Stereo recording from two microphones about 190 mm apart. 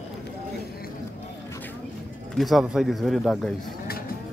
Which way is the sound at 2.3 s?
Centre (ahead or behind).